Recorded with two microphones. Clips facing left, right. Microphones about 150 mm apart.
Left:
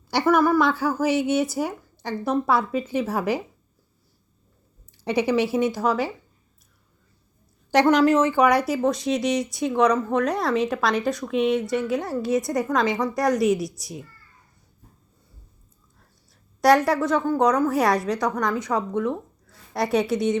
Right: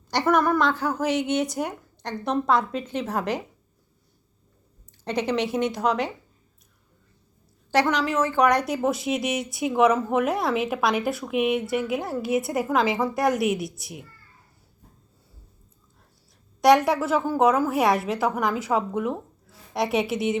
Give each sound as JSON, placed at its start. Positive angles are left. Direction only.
{"t": 0.1, "sound": "speech", "side_deg": 5}
{"t": 5.0, "sound": "speech", "side_deg": 10}
{"t": 7.9, "sound": "speech", "side_deg": 45}
{"t": 8.2, "sound": "speech", "side_deg": 10}
{"t": 16.6, "sound": "speech", "side_deg": 0}